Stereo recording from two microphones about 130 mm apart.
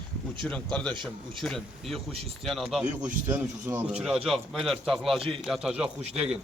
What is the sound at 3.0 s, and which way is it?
Speech, 15° right (ahead or behind).